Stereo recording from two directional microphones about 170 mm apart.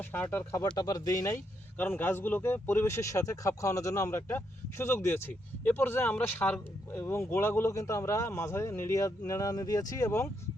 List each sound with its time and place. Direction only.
0.0 s speech: 10° left (ahead or behind)